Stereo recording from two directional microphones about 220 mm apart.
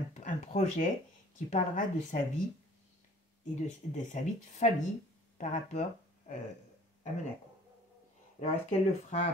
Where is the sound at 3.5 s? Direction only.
35° left (ahead or behind).